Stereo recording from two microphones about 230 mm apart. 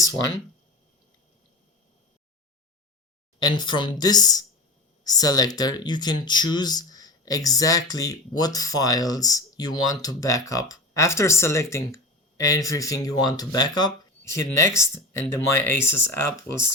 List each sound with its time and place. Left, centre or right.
3.4 s speech: centre